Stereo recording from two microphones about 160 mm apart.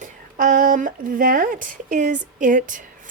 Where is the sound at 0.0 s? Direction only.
55° right (ahead or behind).